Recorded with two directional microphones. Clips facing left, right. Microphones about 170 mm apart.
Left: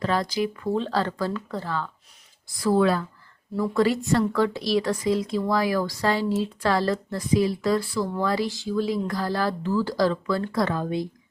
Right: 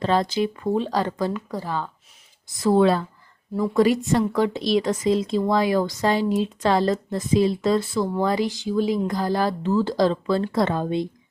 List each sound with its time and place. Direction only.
0.0 s a woman's voice: 25° right (ahead or behind)
0.8 s a woman's voice: 15° right (ahead or behind)